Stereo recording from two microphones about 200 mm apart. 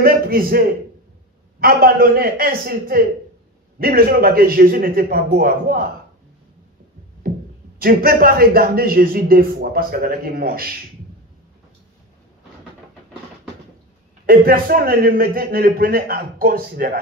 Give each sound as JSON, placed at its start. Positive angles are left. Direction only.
{"t": 0.0, "sound": "a man's voice", "side_deg": -50}
{"t": 7.2, "sound": "a sound", "side_deg": -50}
{"t": 7.8, "sound": "a man's voice", "side_deg": -50}
{"t": 14.2, "sound": "a man's voice", "side_deg": -50}